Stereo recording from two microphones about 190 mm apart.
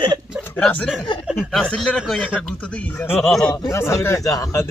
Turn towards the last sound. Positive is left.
turn(degrees=20)  # may be behind; listen again after turning